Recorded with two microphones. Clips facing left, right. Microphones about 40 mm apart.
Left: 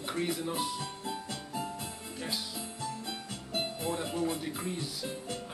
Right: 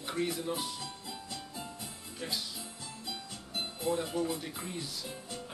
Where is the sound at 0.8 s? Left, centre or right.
Left.